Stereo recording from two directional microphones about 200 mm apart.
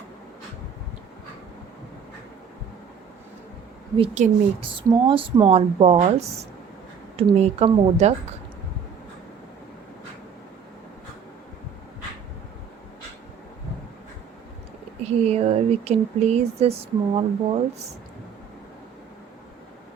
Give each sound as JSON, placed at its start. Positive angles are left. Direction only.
{"t": 3.9, "sound": "speech", "side_deg": -30}
{"t": 15.0, "sound": "speech", "side_deg": -35}